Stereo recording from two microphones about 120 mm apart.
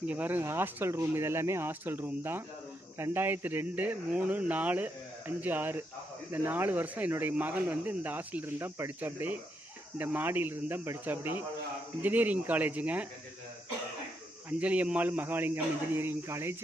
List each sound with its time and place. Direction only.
0.0 s speech: 10° right (ahead or behind)
14.6 s speech: 10° right (ahead or behind)